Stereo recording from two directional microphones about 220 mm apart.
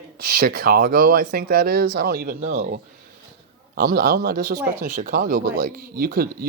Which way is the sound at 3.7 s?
45° right (ahead or behind).